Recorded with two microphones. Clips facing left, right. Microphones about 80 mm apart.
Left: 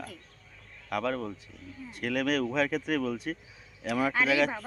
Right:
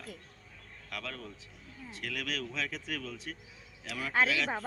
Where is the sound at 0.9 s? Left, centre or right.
Left.